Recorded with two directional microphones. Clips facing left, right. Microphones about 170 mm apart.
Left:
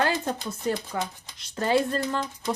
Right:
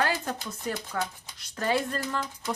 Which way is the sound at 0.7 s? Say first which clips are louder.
Left 3 dB; 30° left (ahead or behind).